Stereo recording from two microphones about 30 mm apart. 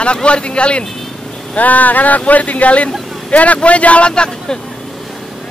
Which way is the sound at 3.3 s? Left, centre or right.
Left.